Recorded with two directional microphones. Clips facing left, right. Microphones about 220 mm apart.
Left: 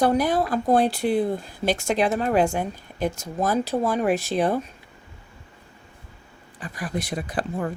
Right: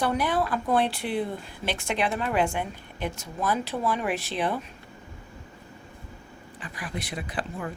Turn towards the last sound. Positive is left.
turn(degrees=45)  # may be behind; listen again after turning